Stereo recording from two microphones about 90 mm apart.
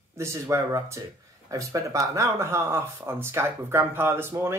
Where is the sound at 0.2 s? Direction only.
30° right (ahead or behind).